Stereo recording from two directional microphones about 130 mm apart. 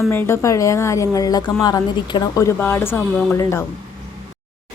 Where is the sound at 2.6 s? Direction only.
15° left (ahead or behind).